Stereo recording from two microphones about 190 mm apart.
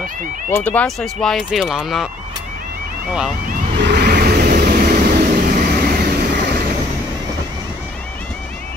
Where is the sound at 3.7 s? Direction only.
60° right (ahead or behind).